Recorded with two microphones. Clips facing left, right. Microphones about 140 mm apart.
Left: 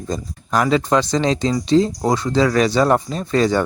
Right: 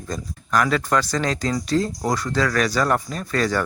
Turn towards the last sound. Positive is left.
turn(degrees=25)  # may be behind; listen again after turning